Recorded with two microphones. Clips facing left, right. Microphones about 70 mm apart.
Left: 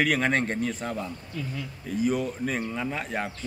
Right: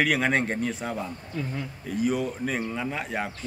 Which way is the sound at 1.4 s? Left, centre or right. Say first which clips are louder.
Right 3 dB; right.